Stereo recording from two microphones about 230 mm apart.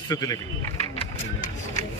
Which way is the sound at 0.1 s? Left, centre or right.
Centre.